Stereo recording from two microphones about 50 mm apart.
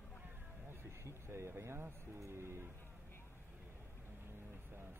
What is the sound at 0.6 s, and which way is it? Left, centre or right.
Speech, right.